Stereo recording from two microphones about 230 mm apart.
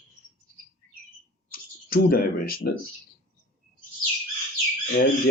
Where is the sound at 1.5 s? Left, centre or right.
Left.